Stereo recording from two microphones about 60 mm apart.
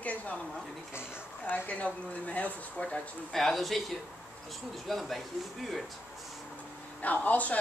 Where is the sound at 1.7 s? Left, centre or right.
Left.